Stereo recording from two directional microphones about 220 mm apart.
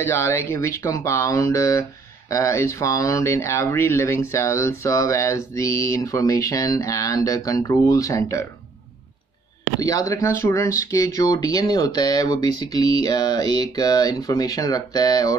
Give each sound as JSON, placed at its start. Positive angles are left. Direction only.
{"t": 0.0, "sound": "speech", "side_deg": 10}
{"t": 9.8, "sound": "speech", "side_deg": 15}